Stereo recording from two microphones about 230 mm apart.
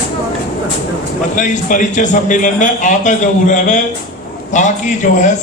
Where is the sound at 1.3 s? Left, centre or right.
Left.